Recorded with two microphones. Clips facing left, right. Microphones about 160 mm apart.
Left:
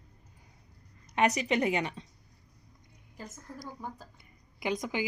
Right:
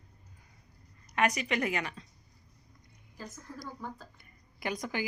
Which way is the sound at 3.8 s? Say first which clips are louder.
Even; 15° left (ahead or behind).